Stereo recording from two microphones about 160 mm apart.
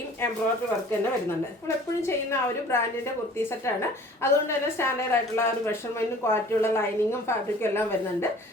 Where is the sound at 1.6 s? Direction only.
15° left (ahead or behind).